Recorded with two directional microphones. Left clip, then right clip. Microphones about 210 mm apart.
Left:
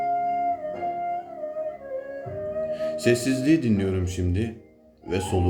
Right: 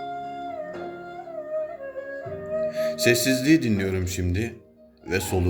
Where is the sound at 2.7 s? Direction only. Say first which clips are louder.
Right 1 dB; 35° right (ahead or behind).